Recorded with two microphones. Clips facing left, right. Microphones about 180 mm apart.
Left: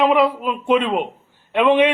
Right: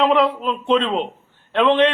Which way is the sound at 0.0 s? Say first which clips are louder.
Left 1 dB; 10° left (ahead or behind).